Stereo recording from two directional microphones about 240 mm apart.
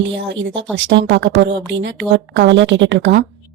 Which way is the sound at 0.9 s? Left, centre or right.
Right.